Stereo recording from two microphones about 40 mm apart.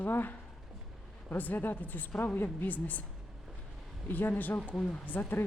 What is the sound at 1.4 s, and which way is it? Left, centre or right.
Speech, left.